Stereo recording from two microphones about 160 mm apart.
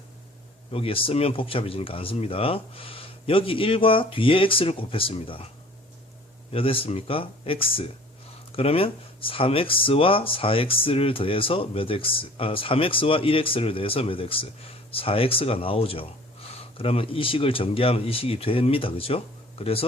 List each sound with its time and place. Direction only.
0.7 s speech: 35° left (ahead or behind)
6.5 s speech: 35° left (ahead or behind)